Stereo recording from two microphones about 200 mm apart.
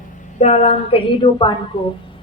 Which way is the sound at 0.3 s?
35° left (ahead or behind).